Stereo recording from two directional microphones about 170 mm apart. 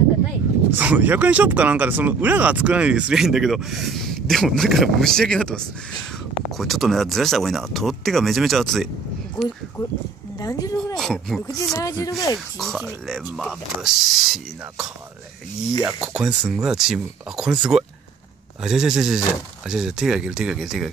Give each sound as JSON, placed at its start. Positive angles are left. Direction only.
{"t": 0.7, "sound": "speech", "side_deg": -10}
{"t": 9.4, "sound": "speech", "side_deg": 25}
{"t": 11.0, "sound": "speech", "side_deg": 0}
{"t": 11.4, "sound": "speech", "side_deg": 20}
{"t": 12.5, "sound": "speech", "side_deg": 0}
{"t": 16.0, "sound": "speech", "side_deg": -5}